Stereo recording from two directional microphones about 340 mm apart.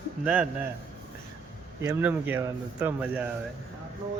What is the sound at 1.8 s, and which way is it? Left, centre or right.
Speech, centre.